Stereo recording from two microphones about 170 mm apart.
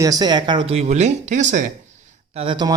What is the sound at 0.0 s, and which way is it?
Speech, 25° right (ahead or behind).